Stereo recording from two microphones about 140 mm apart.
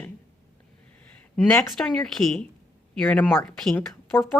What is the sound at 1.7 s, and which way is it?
Speech, centre (ahead or behind).